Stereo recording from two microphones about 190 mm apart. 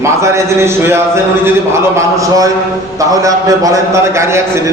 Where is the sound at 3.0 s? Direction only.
15° right (ahead or behind).